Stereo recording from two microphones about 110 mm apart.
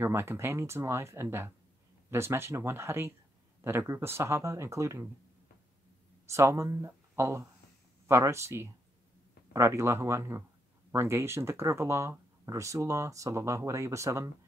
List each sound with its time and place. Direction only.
0.0 s speech: 20° right (ahead or behind)
6.2 s speech: 25° right (ahead or behind)